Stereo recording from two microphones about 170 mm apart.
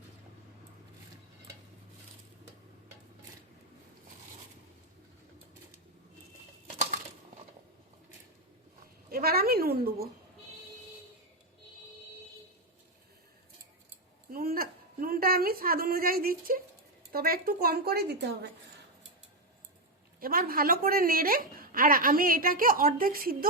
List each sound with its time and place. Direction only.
9.0 s a woman's voice: 60° right (ahead or behind)
14.3 s a sound: 60° right (ahead or behind)
17.1 s a woman's voice: 60° right (ahead or behind)
20.1 s a woman's voice: 55° right (ahead or behind)